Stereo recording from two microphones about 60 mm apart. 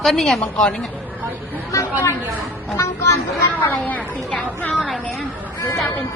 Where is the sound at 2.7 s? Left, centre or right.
Left.